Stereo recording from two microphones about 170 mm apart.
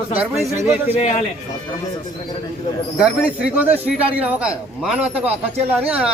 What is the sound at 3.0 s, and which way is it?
Speech, 5° right (ahead or behind).